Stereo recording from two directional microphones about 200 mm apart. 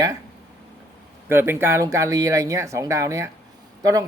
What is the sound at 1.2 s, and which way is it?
A man's voice, 10° right (ahead or behind).